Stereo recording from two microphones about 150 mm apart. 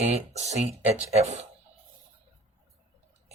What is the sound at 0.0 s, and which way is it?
Speech, 50° right (ahead or behind).